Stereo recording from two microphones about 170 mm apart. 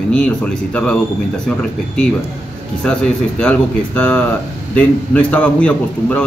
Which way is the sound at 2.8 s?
5° left (ahead or behind).